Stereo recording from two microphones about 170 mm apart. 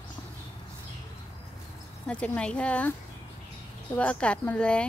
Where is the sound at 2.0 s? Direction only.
5° left (ahead or behind).